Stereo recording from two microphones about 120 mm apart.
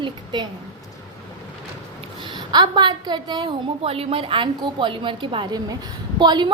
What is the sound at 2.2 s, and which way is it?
A woman's voice, 40° right (ahead or behind).